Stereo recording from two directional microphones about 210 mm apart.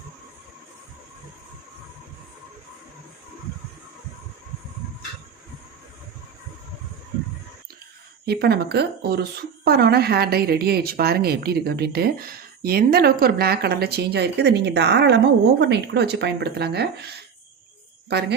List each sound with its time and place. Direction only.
8.3 s a woman's voice: 50° right (ahead or behind)
18.1 s a woman's voice: 50° right (ahead or behind)